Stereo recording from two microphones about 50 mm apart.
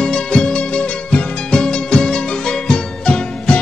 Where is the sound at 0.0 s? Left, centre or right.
Centre.